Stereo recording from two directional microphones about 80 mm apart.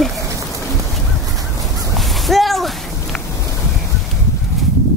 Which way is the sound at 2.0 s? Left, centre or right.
Centre.